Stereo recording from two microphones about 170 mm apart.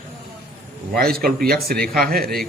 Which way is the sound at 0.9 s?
60° right (ahead or behind).